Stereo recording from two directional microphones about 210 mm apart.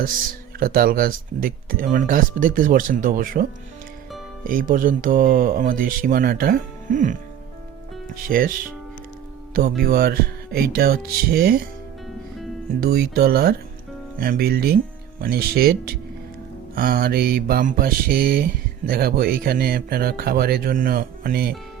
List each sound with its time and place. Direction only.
0.6 s speech: 45° right (ahead or behind)
4.4 s speech: 40° right (ahead or behind)
9.8 s speech: 45° right (ahead or behind)
12.8 s speech: 45° right (ahead or behind)